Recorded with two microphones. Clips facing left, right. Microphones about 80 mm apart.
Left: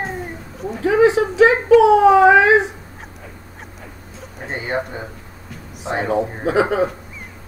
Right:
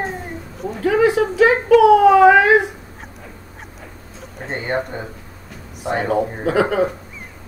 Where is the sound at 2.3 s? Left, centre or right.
Right.